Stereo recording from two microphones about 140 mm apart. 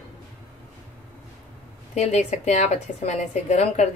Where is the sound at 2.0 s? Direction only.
55° left (ahead or behind).